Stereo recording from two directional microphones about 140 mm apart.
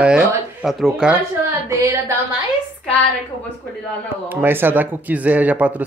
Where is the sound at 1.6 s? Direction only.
20° right (ahead or behind).